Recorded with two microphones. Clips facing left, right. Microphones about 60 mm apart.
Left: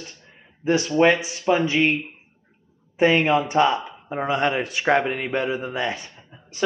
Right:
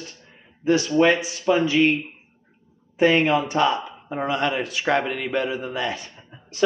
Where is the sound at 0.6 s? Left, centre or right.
Left.